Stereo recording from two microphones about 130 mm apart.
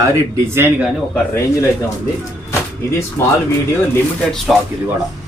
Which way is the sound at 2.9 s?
20° left (ahead or behind).